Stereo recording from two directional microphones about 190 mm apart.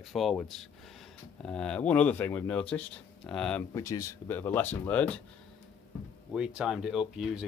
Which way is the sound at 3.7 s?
15° left (ahead or behind).